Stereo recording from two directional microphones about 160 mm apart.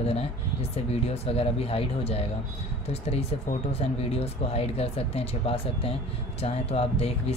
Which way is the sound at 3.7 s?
40° left (ahead or behind).